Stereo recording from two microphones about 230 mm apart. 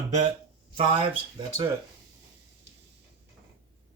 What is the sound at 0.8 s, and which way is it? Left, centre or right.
Speech, right.